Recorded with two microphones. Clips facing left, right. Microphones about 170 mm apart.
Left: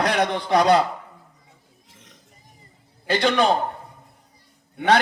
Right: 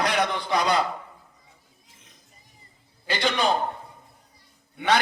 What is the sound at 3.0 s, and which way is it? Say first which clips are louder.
Speech: left 6 dB; 50° left (ahead or behind).